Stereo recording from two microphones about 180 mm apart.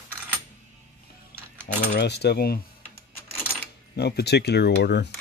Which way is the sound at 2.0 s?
65° left (ahead or behind).